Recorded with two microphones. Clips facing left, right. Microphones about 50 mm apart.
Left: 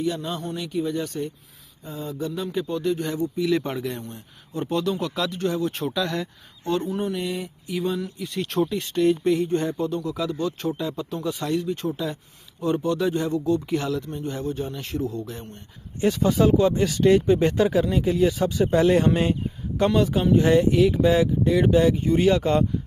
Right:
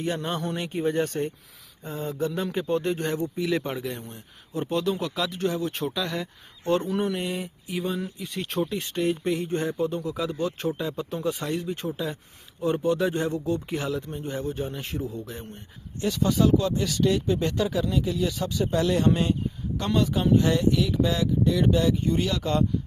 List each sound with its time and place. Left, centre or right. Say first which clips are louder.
0.0 s speech: left 1 dB; right
1.8 s mantra: right 1 dB; right
2.5 s a man's voice: left 1 dB; right
3.6 s speech: left 2 dB; centre
6.7 s speech: right 1 dB; right
7.3 s speech: left 2 dB; centre
9.7 s a man's voice: left 1 dB; centre
11.6 s a man's voice: left 3 dB; centre
14.9 s speech: left 6 dB; centre
16.0 s speech: left 3 dB; left
18.6 s speech: left 5 dB; left
19.9 s speech: even; centre
20.5 s speech: left 5 dB; left